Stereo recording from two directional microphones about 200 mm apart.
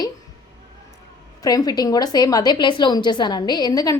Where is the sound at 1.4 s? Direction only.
20° left (ahead or behind).